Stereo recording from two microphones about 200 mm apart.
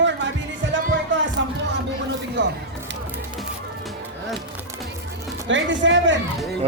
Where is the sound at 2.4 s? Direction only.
60° right (ahead or behind).